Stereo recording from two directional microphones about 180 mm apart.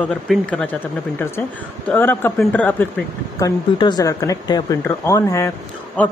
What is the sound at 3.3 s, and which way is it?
A man's voice, 20° left (ahead or behind).